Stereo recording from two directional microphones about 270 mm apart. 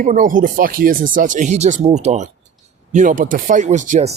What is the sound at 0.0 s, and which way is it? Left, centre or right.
Speech, right.